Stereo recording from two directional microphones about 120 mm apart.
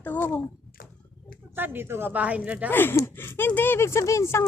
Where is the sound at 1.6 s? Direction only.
15° right (ahead or behind).